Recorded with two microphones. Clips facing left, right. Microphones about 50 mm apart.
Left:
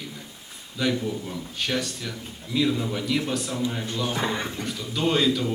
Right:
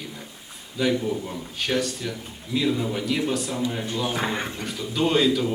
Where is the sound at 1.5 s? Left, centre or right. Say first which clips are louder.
Right 3 dB; centre.